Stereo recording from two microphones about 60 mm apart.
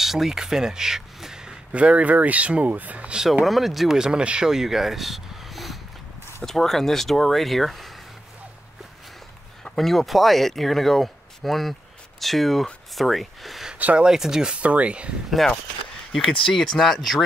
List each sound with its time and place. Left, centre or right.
0.0 s speech: centre; by 3.2 s right
3.4 s speech: centre
9.7 s speech: centre; by 15.0 s right
15.2 s speech: centre